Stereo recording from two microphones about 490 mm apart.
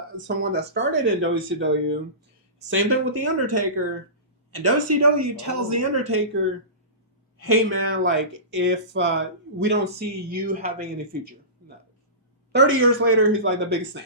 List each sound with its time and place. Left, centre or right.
0.5 s speech: right
12.5 s speech: right